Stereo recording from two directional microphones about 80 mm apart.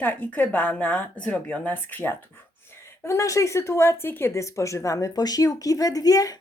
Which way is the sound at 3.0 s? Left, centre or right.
Left.